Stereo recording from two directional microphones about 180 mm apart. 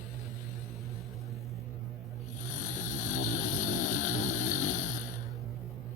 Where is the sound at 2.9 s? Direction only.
45° left (ahead or behind).